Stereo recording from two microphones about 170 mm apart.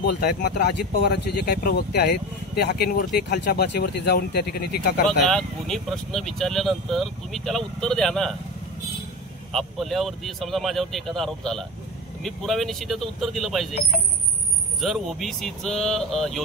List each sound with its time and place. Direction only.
0.0 s speech: 65° left (ahead or behind)
3.2 s speech: 75° left (ahead or behind)
5.2 s speech: centre (ahead or behind)
9.5 s speech: centre (ahead or behind)
14.8 s speech: centre (ahead or behind)